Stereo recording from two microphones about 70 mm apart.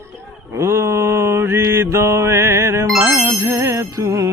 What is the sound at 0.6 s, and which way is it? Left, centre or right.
Mantra, right.